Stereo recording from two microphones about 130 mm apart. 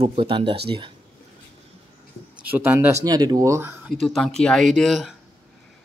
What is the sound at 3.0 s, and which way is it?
Speech, 30° right (ahead or behind).